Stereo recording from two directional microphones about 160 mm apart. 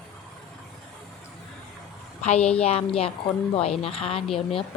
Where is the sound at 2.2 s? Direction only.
40° left (ahead or behind).